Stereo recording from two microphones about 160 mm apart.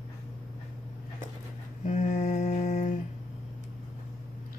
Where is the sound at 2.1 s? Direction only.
50° left (ahead or behind).